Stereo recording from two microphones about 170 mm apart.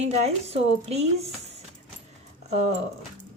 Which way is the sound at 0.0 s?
40° right (ahead or behind).